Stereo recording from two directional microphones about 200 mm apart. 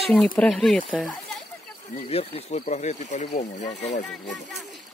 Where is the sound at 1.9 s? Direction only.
30° left (ahead or behind).